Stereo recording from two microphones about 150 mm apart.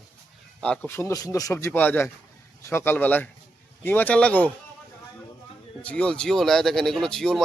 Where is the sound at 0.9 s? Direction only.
15° left (ahead or behind).